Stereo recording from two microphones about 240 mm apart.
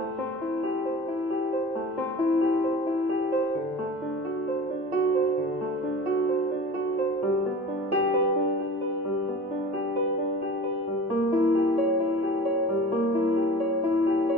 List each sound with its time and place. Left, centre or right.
11.3 s music: left